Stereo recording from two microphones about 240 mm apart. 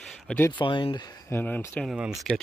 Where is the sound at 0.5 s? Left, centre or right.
Centre.